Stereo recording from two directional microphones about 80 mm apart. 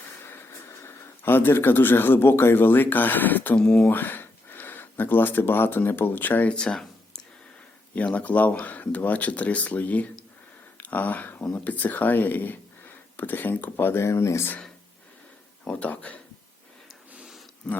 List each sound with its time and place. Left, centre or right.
0.3 s speech: left
15.6 s speech: centre
17.7 s speech: centre